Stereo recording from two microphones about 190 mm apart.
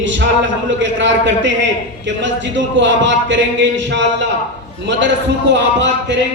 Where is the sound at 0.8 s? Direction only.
75° right (ahead or behind).